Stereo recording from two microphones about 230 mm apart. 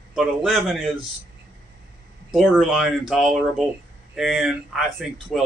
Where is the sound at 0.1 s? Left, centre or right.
Centre.